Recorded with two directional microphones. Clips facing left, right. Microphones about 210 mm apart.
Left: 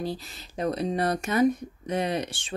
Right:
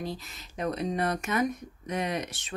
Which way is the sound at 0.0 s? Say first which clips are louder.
Left 4 dB; 35° left (ahead or behind).